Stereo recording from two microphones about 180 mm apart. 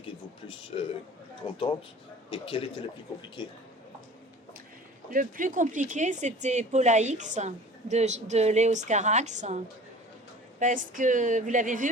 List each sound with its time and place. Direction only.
1.5 s a man's voice: 25° left (ahead or behind)
5.1 s speech: 50° right (ahead or behind)
10.6 s speech: 45° right (ahead or behind)